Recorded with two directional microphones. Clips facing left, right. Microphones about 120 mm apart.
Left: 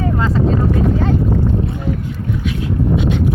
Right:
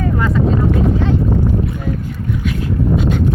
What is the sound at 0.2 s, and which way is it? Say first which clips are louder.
Speech: right 2 dB; 30° left (ahead or behind).